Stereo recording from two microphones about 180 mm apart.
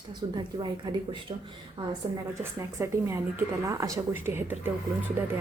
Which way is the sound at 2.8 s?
15° right (ahead or behind).